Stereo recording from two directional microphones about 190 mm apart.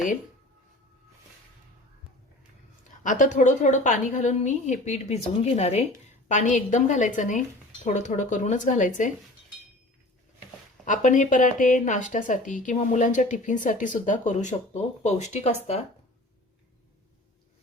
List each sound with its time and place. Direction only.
3.0 s speech: 40° left (ahead or behind)
10.8 s speech: 40° left (ahead or behind)